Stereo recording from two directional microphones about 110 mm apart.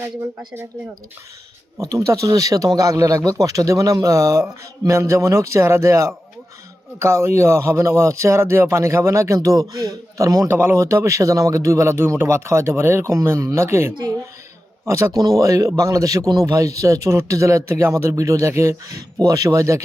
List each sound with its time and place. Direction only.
0.3 s speech: 20° right (ahead or behind)
1.8 s speech: 30° right (ahead or behind)
10.5 s speech: 20° right (ahead or behind)